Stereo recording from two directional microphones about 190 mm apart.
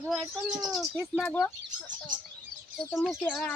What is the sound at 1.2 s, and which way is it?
Chicken, 10° left (ahead or behind).